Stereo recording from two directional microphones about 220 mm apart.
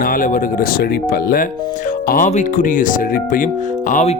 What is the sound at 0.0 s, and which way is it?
Speech, 40° left (ahead or behind).